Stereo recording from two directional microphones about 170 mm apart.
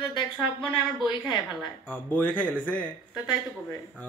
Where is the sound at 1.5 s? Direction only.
5° left (ahead or behind).